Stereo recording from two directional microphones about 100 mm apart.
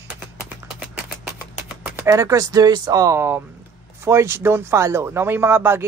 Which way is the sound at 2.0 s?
35° right (ahead or behind).